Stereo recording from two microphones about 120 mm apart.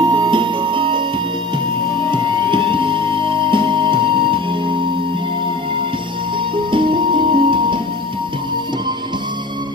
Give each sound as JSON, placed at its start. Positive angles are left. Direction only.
{"t": 0.0, "sound": "music", "side_deg": -40}
{"t": 2.0, "sound": "music", "side_deg": -40}
{"t": 6.5, "sound": "music", "side_deg": -45}